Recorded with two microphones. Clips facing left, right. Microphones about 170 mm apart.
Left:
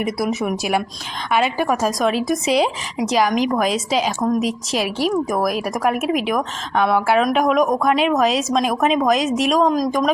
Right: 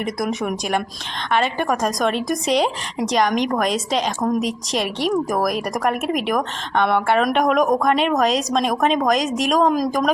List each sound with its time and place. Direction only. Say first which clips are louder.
0.0 s a woman's voice: left 2 dB; 5° left (ahead or behind)